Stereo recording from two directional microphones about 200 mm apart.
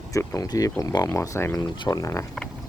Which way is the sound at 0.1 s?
15° left (ahead or behind).